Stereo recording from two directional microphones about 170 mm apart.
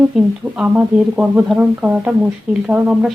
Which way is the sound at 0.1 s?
Centre (ahead or behind).